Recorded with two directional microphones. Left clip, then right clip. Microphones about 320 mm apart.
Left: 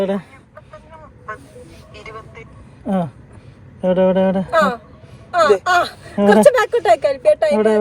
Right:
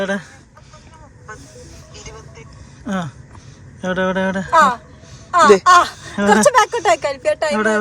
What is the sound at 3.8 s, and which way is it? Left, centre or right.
Speech, centre.